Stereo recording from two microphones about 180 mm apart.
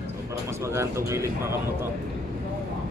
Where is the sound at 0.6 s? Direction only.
15° right (ahead or behind).